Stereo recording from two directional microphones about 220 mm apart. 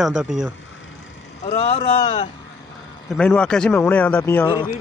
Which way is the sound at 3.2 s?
5° left (ahead or behind).